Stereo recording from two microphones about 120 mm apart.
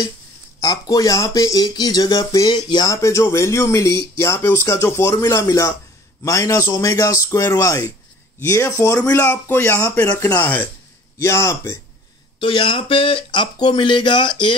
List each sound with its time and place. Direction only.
0.6 s speech: 30° left (ahead or behind)
2.9 s speech: 25° left (ahead or behind)
12.4 s speech: 45° left (ahead or behind)